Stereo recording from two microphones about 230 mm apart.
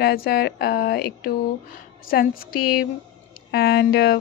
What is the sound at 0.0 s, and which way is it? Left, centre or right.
A woman's voice, left.